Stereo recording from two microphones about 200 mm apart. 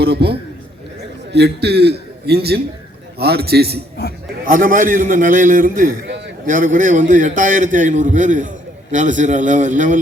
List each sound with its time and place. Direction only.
0.0 s a man's voice: 55° right (ahead or behind)
6.1 s a sound: 60° right (ahead or behind)
6.4 s a man's voice: 40° right (ahead or behind)